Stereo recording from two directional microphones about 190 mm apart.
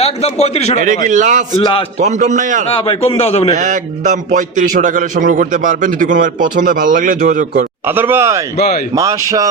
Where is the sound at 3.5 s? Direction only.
40° right (ahead or behind).